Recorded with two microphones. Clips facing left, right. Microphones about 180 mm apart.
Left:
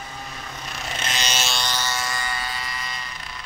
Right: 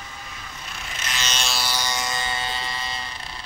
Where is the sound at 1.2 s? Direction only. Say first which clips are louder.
Left 1 dB; 5° left (ahead or behind).